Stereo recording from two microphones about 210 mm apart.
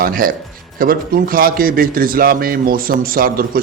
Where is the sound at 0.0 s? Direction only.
45° right (ahead or behind).